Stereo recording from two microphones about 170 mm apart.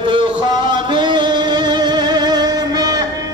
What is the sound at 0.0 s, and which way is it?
Music, 25° right (ahead or behind).